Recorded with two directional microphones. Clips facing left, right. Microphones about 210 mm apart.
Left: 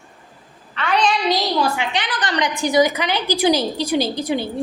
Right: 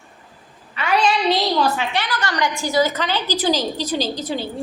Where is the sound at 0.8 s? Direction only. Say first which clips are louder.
Even; 10° right (ahead or behind).